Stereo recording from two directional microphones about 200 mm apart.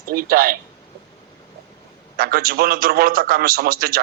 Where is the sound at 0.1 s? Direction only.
45° right (ahead or behind).